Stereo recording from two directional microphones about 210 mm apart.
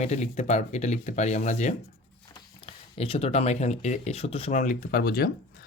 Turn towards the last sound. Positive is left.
turn(degrees=45)  # may be behind; listen again after turning